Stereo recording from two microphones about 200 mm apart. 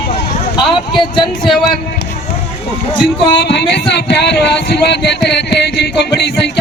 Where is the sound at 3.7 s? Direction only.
55° left (ahead or behind).